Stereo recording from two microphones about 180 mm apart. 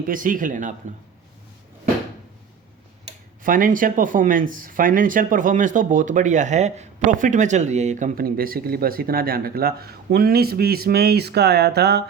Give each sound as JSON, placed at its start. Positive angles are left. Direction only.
{"t": 0.1, "sound": "speech", "side_deg": -50}
{"t": 3.4, "sound": "speech", "side_deg": -50}